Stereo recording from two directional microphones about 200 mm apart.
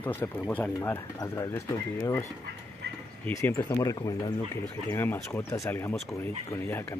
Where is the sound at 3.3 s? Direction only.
10° left (ahead or behind).